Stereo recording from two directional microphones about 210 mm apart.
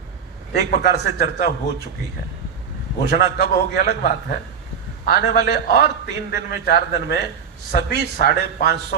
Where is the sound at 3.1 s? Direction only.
45° left (ahead or behind).